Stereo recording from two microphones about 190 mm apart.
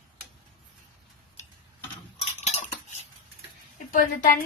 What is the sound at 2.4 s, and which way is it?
Cutlery, 35° left (ahead or behind).